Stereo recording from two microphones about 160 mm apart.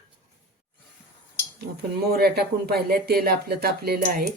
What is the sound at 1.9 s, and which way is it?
A woman's voice, 85° right.